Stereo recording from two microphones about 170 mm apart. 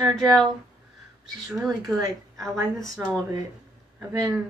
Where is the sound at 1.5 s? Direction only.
Centre (ahead or behind).